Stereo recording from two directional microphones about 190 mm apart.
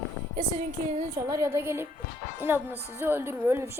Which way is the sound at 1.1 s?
15° right (ahead or behind).